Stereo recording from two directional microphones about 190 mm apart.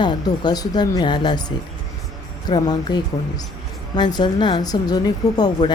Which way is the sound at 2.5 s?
25° left (ahead or behind).